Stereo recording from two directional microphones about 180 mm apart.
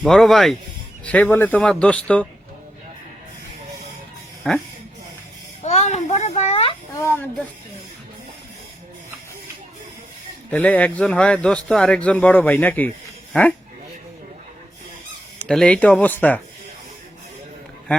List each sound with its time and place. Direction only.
0.0 s speech: centre (ahead or behind)
4.4 s speech: 5° left (ahead or behind)
5.6 s a sound: 40° left (ahead or behind)
6.9 s speech: 15° left (ahead or behind)
10.5 s speech: 5° left (ahead or behind)
15.4 s speech: 5° left (ahead or behind)